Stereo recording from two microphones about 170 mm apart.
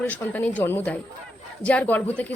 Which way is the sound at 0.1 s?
10° left (ahead or behind).